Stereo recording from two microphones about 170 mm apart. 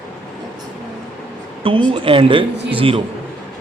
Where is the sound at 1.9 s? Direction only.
30° right (ahead or behind).